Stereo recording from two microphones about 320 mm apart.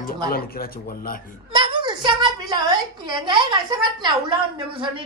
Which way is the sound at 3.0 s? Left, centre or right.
Centre.